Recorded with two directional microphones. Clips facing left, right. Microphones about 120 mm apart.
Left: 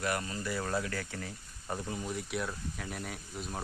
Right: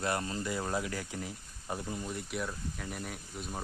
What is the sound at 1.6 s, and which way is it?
Speech, centre (ahead or behind).